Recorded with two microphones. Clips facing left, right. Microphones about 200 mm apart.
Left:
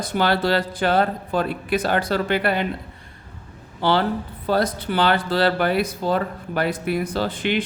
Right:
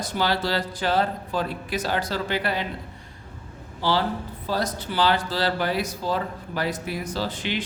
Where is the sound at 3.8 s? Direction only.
60° left (ahead or behind).